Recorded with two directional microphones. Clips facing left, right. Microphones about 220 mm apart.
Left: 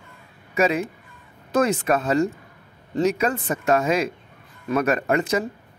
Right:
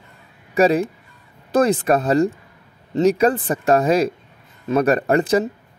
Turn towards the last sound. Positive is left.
turn(degrees=-35)  # may be behind; listen again after turning